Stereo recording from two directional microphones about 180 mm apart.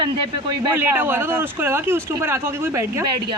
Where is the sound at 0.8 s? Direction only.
10° right (ahead or behind).